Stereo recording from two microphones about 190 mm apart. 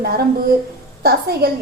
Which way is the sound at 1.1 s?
55° right (ahead or behind).